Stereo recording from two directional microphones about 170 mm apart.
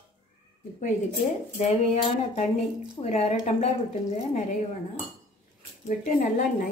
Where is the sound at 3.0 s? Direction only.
40° left (ahead or behind).